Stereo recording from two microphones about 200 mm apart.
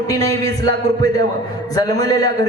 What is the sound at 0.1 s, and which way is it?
Speech, 15° left (ahead or behind).